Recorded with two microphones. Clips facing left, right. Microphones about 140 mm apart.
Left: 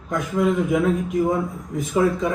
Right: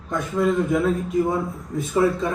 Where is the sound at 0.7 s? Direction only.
Centre (ahead or behind).